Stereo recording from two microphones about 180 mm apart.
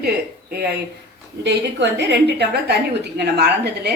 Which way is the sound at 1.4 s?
70° right (ahead or behind).